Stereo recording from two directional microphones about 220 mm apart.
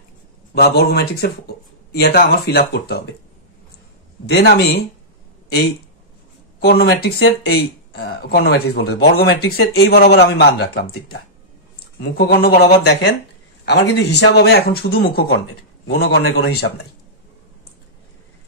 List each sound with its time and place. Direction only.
0.6 s speech: 45° left (ahead or behind)
4.3 s speech: 45° left (ahead or behind)
6.6 s speech: 45° left (ahead or behind)